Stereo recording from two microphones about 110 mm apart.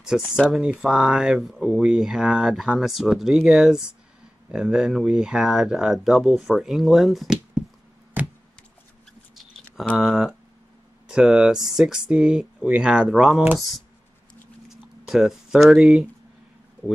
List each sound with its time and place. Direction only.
0.0 s speech: 5° right (ahead or behind)
8.2 s a sound: 15° right (ahead or behind)
9.9 s speech: centre (ahead or behind)
15.0 s speech: 5° right (ahead or behind)